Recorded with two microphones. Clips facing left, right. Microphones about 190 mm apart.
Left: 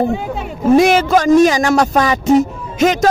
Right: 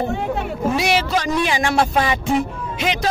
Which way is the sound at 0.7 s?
50° left (ahead or behind).